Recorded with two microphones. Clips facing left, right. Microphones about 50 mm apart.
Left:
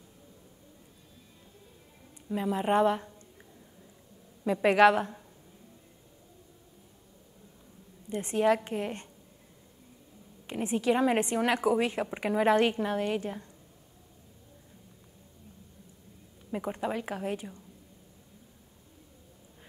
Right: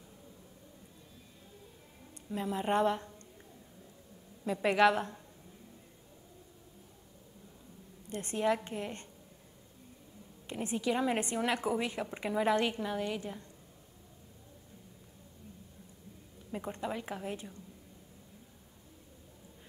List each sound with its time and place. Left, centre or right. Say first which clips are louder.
2.2 s a woman's voice: left 5 dB; centre
4.5 s a woman's voice: left 5 dB; left
8.1 s a woman's voice: left 6 dB; left
10.4 s a woman's voice: left 5 dB; left
16.5 s a woman's voice: left 5 dB; left